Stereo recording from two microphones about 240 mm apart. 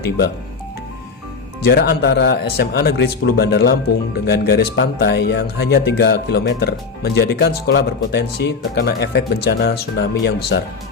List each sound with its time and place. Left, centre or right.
1.6 s speech: left